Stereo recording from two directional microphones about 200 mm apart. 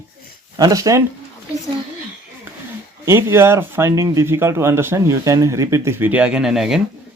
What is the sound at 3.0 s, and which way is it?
Speech, 15° right (ahead or behind).